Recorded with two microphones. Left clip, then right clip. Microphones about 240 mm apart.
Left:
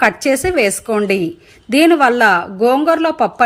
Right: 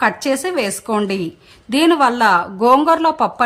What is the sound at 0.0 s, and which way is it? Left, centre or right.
A woman's voice, centre.